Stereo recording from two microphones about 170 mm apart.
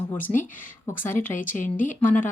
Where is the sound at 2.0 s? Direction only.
10° left (ahead or behind).